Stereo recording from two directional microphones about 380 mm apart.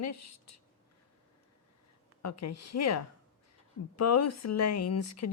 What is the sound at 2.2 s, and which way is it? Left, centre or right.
A woman's voice, left.